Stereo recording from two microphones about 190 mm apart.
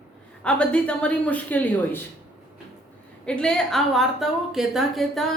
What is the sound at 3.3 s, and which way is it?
A woman's voice, 5° left (ahead or behind).